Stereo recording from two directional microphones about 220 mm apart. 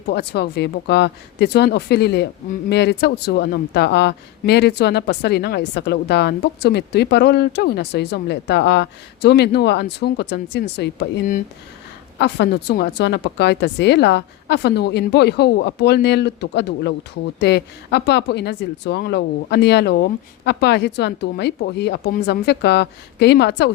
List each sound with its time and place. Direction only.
0.1 s speech: 45° left (ahead or behind)